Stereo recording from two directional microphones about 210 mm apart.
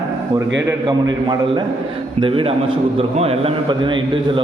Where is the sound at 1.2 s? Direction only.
20° right (ahead or behind).